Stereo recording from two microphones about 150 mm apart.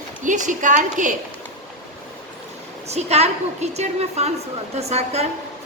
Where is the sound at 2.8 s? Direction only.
45° right (ahead or behind).